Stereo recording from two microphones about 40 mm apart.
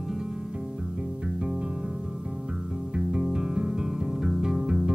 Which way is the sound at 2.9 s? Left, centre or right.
Right.